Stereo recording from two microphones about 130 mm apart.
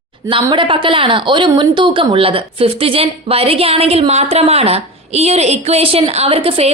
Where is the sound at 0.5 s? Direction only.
40° right (ahead or behind).